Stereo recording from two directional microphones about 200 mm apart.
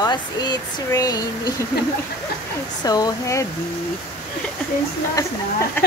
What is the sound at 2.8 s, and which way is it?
Speech, 20° left (ahead or behind).